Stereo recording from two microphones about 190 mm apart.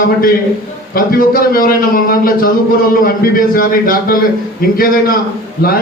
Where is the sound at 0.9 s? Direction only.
50° left (ahead or behind).